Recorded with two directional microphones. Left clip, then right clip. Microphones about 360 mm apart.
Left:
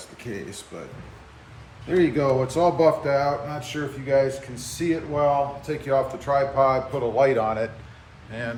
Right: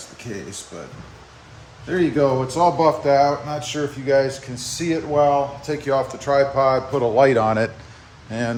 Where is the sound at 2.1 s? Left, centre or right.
Centre.